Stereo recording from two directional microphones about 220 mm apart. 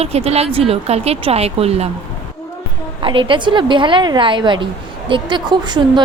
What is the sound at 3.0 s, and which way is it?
A woman's voice, 25° right (ahead or behind).